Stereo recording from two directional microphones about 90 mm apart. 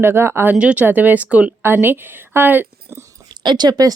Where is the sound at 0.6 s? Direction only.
15° right (ahead or behind).